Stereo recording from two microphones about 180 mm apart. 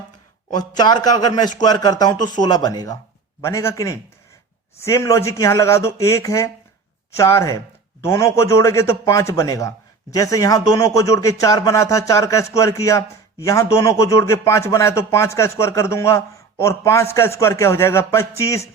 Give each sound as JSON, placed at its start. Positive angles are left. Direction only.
{"t": 0.8, "sound": "a man's voice", "side_deg": 25}